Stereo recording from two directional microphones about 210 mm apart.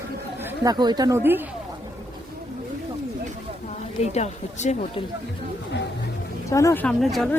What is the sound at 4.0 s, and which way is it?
Speech, 30° left (ahead or behind).